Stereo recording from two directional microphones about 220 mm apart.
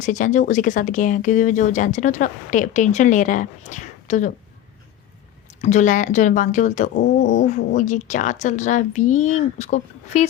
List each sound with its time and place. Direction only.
0.0 s speech: 35° left (ahead or behind)
5.6 s speech: 35° left (ahead or behind)